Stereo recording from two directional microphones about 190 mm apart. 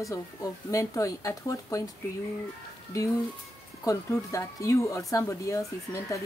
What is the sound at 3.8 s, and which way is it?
Speech, 15° left (ahead or behind).